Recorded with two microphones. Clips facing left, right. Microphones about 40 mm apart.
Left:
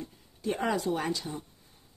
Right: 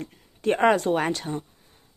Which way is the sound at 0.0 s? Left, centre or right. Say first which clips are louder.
Right 8 dB; right.